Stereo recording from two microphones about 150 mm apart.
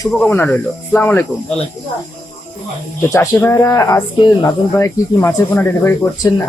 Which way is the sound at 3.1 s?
20° left (ahead or behind).